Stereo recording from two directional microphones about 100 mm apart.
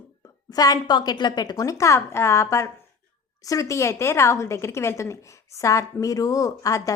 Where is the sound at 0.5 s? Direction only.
40° left (ahead or behind).